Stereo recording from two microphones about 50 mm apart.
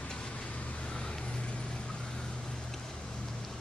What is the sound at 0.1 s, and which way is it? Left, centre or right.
Vehicle, centre.